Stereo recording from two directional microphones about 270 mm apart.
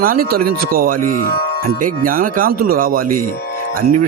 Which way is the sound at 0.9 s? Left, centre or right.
Right.